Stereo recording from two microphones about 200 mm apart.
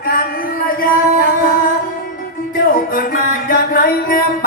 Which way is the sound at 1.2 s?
45° left (ahead or behind).